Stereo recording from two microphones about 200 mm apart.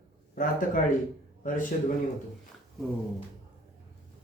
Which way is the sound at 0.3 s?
40° left (ahead or behind).